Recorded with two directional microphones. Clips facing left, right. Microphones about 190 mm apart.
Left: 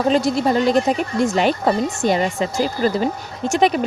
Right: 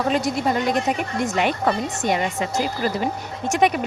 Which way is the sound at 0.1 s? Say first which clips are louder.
Left 6 dB; 30° left (ahead or behind).